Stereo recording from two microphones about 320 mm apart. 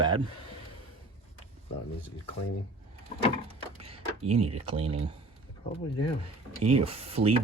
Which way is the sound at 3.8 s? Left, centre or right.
Centre.